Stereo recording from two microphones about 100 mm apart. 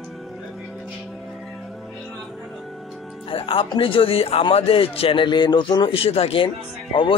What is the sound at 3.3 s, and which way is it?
A man's voice, 65° left (ahead or behind).